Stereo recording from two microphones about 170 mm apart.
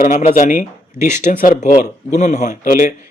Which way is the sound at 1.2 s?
50° left (ahead or behind).